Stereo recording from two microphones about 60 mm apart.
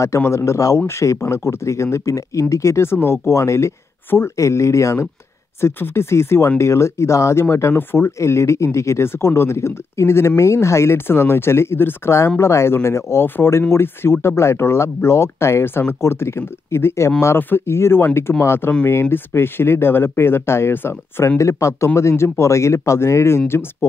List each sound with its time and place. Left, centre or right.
0.4 s speech: left
0.7 s speech: left
5.6 s speech: left
8.2 s speech: left
17.4 s speech: left
21.4 s speech: left